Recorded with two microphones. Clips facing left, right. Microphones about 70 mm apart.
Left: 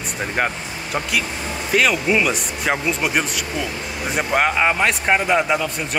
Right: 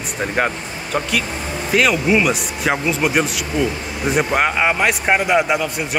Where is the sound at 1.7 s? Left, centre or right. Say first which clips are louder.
Right 2 dB; centre.